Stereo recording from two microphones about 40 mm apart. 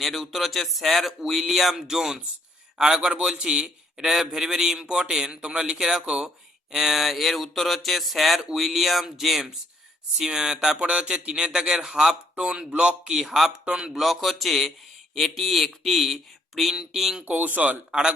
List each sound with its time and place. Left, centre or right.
0.0 s speech: centre; by 3.7 s right
3.9 s a man's voice: centre
6.7 s speech: centre; by 12.9 s right
13.1 s speech: centre
13.9 s speech: centre
17.2 s speech: right